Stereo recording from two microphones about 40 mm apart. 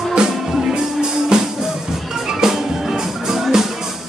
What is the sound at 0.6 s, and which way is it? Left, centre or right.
Music, right.